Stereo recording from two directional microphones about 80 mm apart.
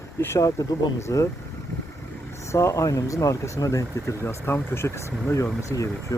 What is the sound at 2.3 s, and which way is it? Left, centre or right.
Speech, left.